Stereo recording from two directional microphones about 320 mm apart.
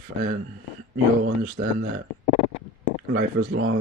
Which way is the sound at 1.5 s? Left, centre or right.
Right.